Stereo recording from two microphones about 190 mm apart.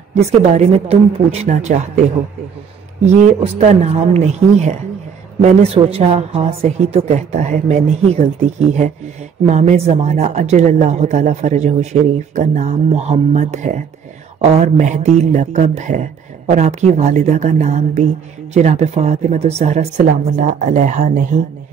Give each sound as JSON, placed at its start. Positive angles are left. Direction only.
{"t": 0.1, "sound": "speech", "side_deg": -35}
{"t": 3.1, "sound": "speech", "side_deg": -35}